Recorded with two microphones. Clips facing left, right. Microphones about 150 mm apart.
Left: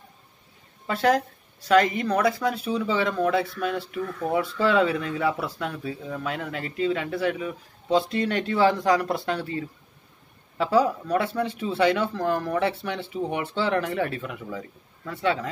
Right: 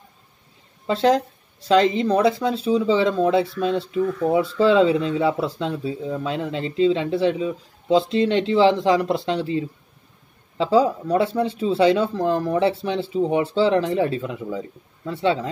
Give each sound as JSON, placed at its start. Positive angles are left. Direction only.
{"t": 0.8, "sound": "speech", "side_deg": -25}